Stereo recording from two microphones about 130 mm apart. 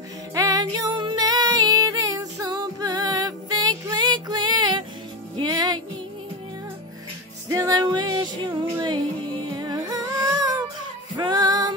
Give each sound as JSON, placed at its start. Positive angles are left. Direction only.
{"t": 0.3, "sound": "music", "side_deg": -25}
{"t": 7.4, "sound": "music", "side_deg": -25}